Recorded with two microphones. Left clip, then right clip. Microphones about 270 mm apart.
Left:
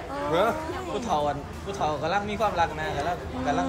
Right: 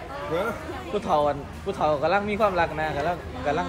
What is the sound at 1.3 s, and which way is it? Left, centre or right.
A man's voice, right.